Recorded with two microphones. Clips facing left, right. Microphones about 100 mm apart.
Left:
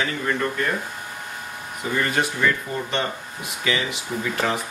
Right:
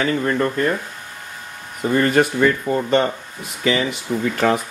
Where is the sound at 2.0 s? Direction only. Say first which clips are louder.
Right 7 dB; 45° right (ahead or behind).